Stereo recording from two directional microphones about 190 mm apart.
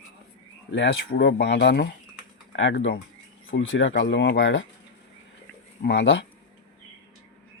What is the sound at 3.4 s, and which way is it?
Speech, 90° left.